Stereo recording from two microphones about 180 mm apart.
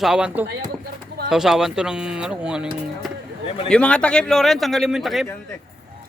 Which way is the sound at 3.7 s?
5° left (ahead or behind).